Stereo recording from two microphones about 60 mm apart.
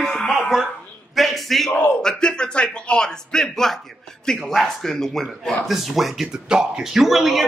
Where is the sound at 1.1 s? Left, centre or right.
Centre.